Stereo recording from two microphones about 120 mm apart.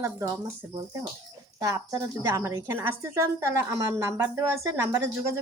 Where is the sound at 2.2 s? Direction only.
25° right (ahead or behind).